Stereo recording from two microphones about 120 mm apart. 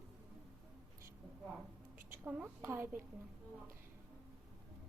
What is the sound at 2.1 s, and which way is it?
Speech, 15° right (ahead or behind).